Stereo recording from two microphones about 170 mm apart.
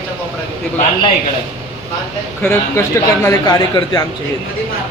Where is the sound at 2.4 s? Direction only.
15° left (ahead or behind).